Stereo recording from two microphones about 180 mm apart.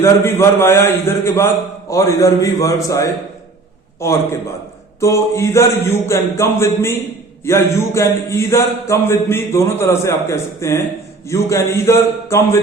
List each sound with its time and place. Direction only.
0.0 s speech: 15° left (ahead or behind)